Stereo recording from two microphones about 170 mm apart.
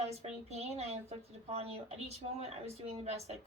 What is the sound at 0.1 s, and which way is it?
A woman's voice, 40° right (ahead or behind).